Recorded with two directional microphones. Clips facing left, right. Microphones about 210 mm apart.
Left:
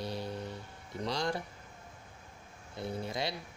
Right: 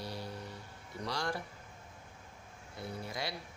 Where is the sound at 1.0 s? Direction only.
20° left (ahead or behind).